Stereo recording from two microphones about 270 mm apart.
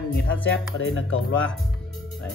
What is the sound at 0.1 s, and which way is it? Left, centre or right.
Speech, left.